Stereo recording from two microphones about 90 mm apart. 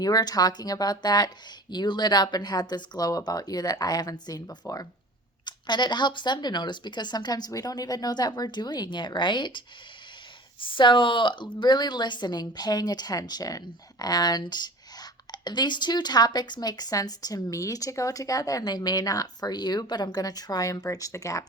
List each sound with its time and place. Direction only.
0.0 s speech: 45° left (ahead or behind)
5.5 s speech: 55° left (ahead or behind); by 21.4 s 35° left (ahead or behind)